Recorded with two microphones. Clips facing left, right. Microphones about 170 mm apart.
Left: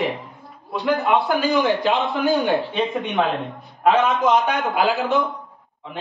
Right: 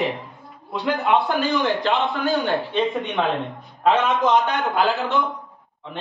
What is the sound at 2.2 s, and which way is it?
Speech, 20° left (ahead or behind).